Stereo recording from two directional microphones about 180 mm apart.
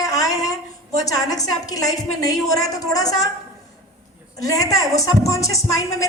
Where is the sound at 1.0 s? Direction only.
20° left (ahead or behind).